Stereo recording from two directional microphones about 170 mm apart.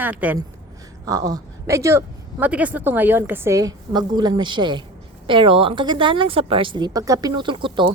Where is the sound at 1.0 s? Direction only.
20° right (ahead or behind).